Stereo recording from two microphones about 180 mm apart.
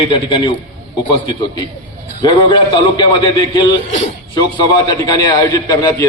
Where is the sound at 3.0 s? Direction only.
20° left (ahead or behind).